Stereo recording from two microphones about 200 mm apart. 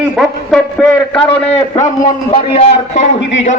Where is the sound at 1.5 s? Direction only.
35° left (ahead or behind).